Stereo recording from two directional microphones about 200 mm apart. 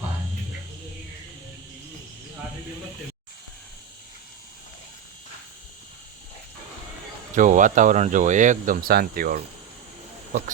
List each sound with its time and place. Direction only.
7.3 s speech: 40° right (ahead or behind)